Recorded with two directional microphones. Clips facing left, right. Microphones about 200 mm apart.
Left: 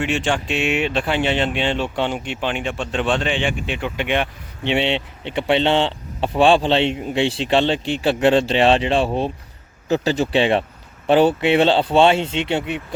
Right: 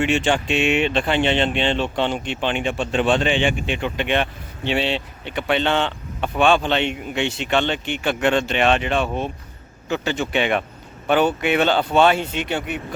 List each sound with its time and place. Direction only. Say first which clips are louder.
0.0 s speech: right 2 dB; centre (ahead or behind); by 12.8 s 25° left (ahead or behind)